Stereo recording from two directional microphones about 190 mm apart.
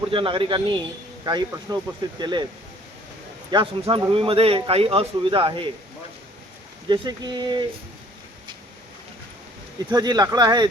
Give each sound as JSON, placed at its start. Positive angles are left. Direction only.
{"t": 0.1, "sound": "a man's voice", "side_deg": -25}
{"t": 3.5, "sound": "a man's voice", "side_deg": -25}
{"t": 6.8, "sound": "a man's voice", "side_deg": -25}
{"t": 9.9, "sound": "a man's voice", "side_deg": -20}